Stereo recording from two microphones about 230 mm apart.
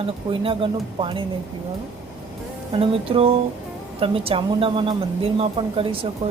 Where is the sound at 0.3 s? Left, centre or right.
Right.